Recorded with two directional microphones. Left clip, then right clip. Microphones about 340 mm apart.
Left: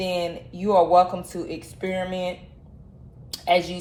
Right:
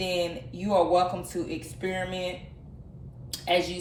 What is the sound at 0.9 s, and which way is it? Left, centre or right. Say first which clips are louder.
Speech: left 6 dB; left.